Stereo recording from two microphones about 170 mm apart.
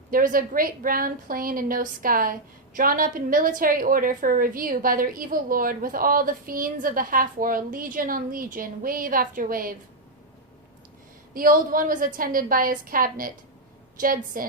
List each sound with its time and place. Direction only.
0.1 s a woman's voice: 55° right (ahead or behind)
11.3 s a woman's voice: 55° right (ahead or behind)